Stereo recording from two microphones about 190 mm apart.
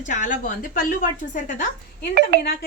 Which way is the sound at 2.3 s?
55° right (ahead or behind).